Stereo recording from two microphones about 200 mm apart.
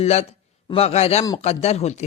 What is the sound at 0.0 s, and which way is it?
A man's voice, 30° left (ahead or behind).